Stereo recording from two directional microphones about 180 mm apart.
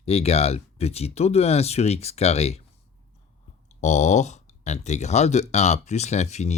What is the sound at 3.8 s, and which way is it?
Speech, 40° left (ahead or behind).